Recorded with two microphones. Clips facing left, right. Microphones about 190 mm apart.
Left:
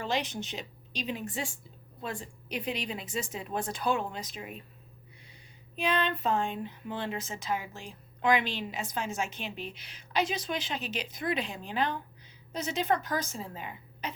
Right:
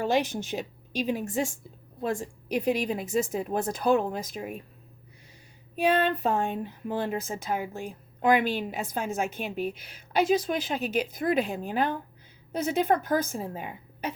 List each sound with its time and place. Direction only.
0.0 s speech: 50° right (ahead or behind)
5.7 s speech: 50° right (ahead or behind)